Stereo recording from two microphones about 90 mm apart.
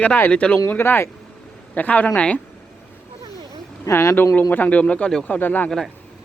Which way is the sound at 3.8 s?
35° left (ahead or behind).